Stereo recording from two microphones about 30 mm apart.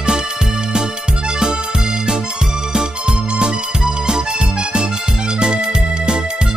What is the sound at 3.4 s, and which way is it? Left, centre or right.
Music, right.